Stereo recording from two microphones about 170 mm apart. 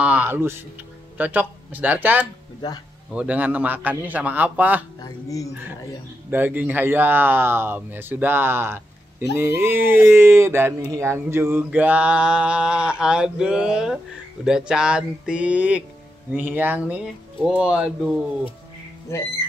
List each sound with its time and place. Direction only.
0.0 s speech: 10° right (ahead or behind)
2.6 s a woman's voice: 25° left (ahead or behind)
3.1 s speech: 10° right (ahead or behind)
5.0 s a woman's voice: 20° left (ahead or behind)
6.3 s speech: 10° right (ahead or behind)
19.1 s speech: 15° left (ahead or behind)